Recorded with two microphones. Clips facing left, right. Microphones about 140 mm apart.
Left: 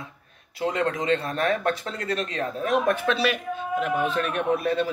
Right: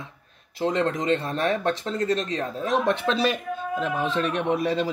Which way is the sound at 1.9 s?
35° right (ahead or behind).